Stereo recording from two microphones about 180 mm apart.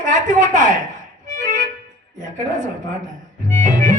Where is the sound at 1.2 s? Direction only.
45° right (ahead or behind).